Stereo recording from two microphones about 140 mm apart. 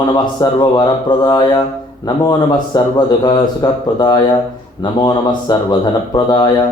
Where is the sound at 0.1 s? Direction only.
30° left (ahead or behind).